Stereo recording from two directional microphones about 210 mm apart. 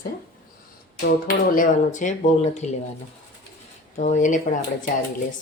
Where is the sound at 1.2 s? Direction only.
40° left (ahead or behind).